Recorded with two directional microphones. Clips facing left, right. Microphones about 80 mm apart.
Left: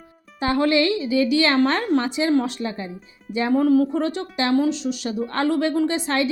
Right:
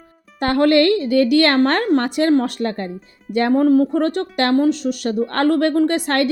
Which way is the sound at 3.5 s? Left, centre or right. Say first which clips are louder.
Right 3 dB; right.